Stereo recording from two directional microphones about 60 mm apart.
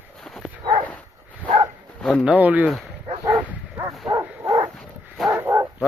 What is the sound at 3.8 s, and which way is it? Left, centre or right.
Dog, right.